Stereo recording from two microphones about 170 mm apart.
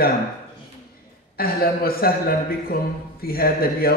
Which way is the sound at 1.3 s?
60° left (ahead or behind).